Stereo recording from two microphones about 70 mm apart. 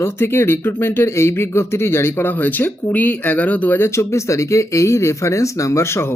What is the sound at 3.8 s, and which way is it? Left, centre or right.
Speech, left.